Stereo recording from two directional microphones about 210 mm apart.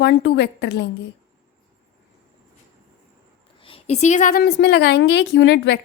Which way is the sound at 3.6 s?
30° left (ahead or behind).